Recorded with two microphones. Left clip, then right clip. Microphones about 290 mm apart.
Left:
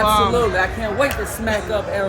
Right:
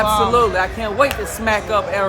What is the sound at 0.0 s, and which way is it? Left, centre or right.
Speech, centre.